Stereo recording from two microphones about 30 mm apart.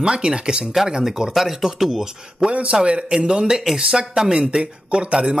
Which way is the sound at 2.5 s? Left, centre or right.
Right.